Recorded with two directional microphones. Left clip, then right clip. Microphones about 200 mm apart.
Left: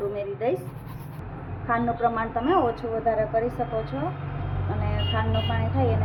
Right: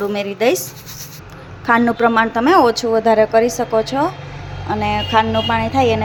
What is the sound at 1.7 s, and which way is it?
A woman's voice, 65° right (ahead or behind).